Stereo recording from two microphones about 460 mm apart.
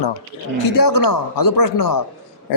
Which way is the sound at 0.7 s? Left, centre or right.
Left.